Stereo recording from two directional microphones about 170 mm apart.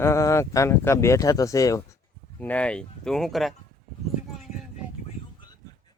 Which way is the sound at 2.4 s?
10° left (ahead or behind).